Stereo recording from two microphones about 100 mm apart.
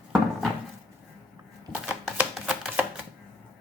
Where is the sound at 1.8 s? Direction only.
10° right (ahead or behind).